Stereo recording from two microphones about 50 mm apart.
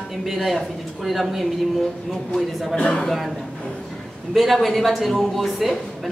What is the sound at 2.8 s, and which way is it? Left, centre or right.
Speech, centre.